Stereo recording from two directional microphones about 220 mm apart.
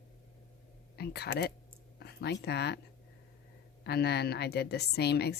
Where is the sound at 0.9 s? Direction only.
45° left (ahead or behind).